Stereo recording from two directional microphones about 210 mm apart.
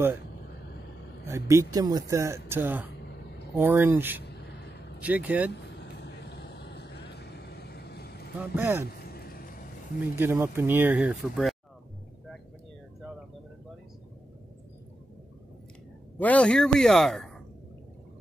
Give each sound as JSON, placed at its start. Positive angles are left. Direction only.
{"t": 1.2, "sound": "speech", "side_deg": -15}
{"t": 4.3, "sound": "a sound", "side_deg": 50}
{"t": 5.0, "sound": "speech", "side_deg": -5}
{"t": 5.5, "sound": "vehicle", "side_deg": 55}
{"t": 8.4, "sound": "speech", "side_deg": -10}
{"t": 9.0, "sound": "vehicle", "side_deg": 45}
{"t": 10.1, "sound": "speech", "side_deg": -10}
{"t": 16.2, "sound": "speech", "side_deg": 5}